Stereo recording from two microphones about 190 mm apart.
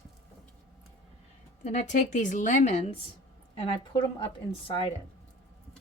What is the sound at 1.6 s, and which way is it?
A woman's voice, 40° left (ahead or behind).